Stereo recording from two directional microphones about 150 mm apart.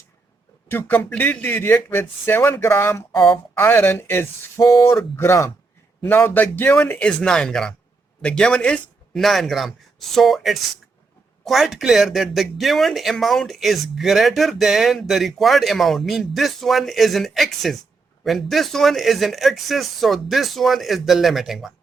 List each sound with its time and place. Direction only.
0.7 s speech: 15° left (ahead or behind)